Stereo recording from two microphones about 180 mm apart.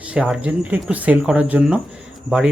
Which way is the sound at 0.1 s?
5° right (ahead or behind).